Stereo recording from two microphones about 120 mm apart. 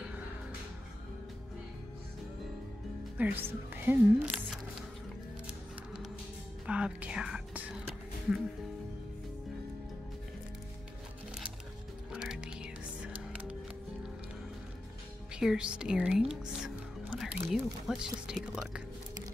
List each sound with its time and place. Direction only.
3.2 s speech: 15° right (ahead or behind)
6.6 s music: 10° right (ahead or behind)
12.1 s music: 5° right (ahead or behind)
15.3 s speech: 5° right (ahead or behind)